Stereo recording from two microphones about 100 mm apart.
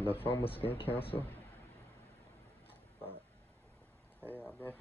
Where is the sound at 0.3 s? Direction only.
65° left (ahead or behind).